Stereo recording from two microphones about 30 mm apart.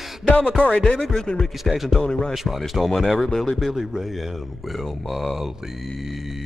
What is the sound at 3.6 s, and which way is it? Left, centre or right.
Speech, centre.